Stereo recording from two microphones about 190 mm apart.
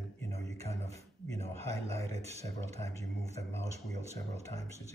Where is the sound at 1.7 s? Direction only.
35° right (ahead or behind).